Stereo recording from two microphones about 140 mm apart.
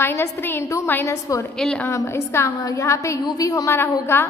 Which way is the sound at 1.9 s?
20° left (ahead or behind).